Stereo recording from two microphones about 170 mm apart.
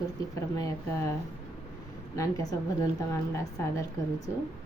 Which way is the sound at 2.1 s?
20° left (ahead or behind).